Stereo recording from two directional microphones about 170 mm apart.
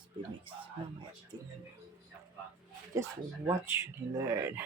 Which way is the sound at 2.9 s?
20° right (ahead or behind).